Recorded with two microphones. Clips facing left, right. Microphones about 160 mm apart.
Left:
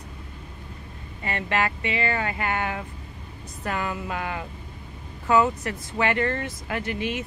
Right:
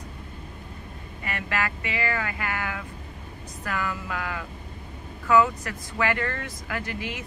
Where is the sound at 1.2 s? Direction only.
25° left (ahead or behind).